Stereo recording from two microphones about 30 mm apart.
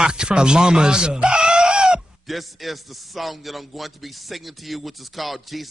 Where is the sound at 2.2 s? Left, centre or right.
Centre.